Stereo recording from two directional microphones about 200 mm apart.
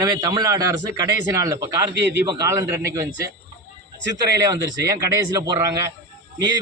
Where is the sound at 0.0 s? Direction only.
20° right (ahead or behind).